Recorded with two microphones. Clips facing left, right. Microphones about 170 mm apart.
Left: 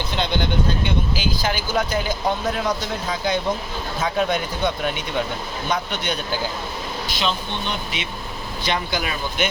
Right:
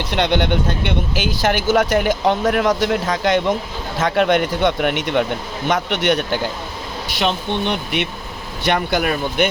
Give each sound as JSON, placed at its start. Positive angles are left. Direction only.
{"t": 0.1, "sound": "speech", "side_deg": -70}
{"t": 1.4, "sound": "speech", "side_deg": -80}
{"t": 5.6, "sound": "speech", "side_deg": -85}
{"t": 7.2, "sound": "speech", "side_deg": -65}